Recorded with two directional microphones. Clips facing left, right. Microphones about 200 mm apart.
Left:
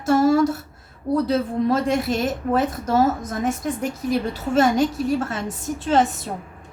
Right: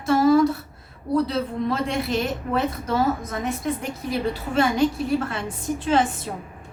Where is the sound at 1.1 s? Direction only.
45° left (ahead or behind).